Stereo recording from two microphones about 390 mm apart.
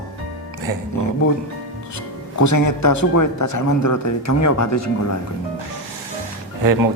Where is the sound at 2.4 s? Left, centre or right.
Left.